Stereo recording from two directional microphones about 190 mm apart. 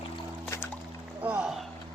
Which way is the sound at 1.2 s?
5° right (ahead or behind).